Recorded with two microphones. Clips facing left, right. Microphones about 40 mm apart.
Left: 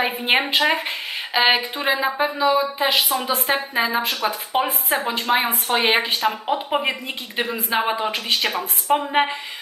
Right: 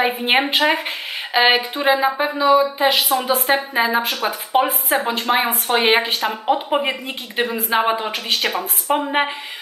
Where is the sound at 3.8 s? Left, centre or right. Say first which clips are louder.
Right 2 dB; centre.